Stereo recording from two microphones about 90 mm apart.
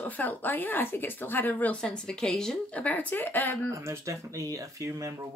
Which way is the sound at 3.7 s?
30° right (ahead or behind).